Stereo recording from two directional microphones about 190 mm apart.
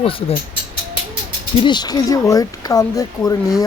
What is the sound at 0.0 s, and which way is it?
Speech, 30° left (ahead or behind).